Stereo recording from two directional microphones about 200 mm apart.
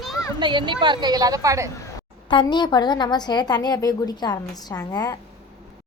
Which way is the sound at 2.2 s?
25° left (ahead or behind).